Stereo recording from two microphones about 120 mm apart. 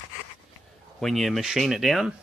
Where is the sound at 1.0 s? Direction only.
Centre (ahead or behind).